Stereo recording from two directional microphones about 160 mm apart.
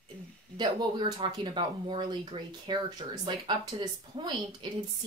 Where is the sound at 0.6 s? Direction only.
25° right (ahead or behind).